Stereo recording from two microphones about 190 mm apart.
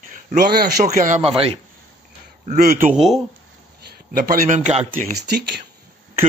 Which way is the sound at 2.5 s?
50° right (ahead or behind).